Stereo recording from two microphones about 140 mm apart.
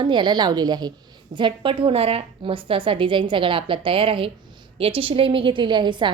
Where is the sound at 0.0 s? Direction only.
35° right (ahead or behind).